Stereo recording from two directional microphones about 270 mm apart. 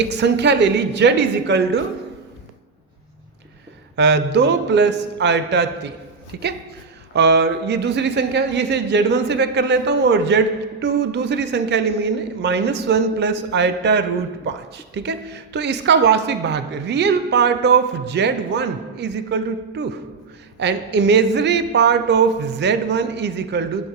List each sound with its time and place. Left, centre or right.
0.1 s speech: right
3.9 s speech: right
15.5 s speech: right